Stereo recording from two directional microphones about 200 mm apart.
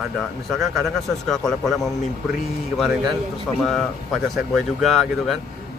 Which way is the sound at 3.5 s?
Centre (ahead or behind).